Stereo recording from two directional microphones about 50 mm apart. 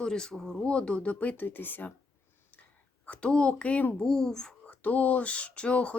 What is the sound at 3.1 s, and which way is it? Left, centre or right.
Speech, left.